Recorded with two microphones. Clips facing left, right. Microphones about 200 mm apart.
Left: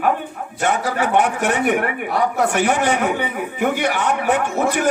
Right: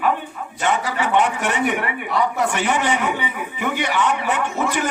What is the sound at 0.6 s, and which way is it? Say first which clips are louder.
A man's voice: left 2 dB; 50° left (ahead or behind).